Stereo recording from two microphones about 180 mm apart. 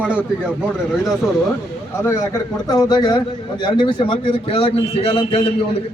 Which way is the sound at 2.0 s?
15° left (ahead or behind).